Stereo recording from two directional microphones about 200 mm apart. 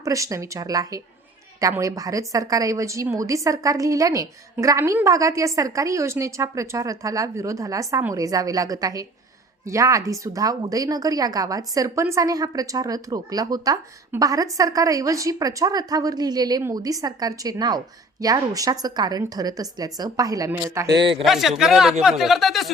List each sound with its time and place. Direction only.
0.0 s a woman's voice: 15° right (ahead or behind)
21.2 s speech: centre (ahead or behind)